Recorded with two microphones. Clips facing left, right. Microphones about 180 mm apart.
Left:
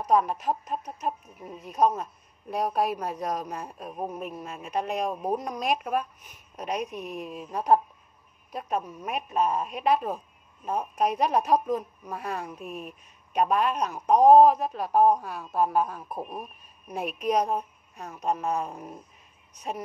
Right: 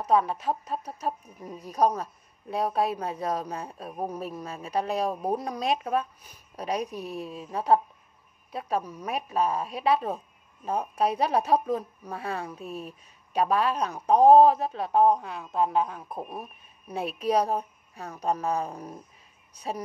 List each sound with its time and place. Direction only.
0.0 s speech: 30° right (ahead or behind)
17.0 s a woman's voice: 30° right (ahead or behind)